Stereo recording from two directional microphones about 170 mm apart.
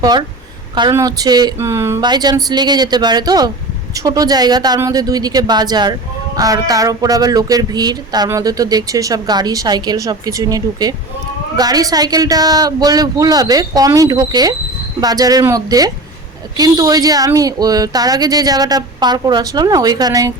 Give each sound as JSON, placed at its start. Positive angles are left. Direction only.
{"t": 0.0, "sound": "speech", "side_deg": -25}